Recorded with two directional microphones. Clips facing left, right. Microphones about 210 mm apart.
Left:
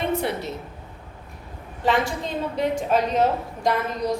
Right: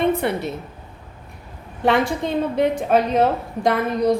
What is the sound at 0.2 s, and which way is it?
Speech, 60° right (ahead or behind).